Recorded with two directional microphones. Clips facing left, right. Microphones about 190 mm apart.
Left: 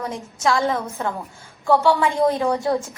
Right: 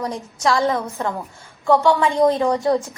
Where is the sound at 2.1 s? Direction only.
15° right (ahead or behind).